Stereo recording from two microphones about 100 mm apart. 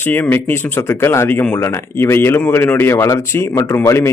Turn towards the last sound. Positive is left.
turn(degrees=30)  # may be behind; listen again after turning